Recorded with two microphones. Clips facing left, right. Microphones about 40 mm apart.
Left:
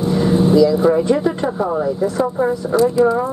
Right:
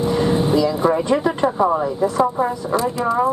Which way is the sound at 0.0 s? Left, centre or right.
Centre.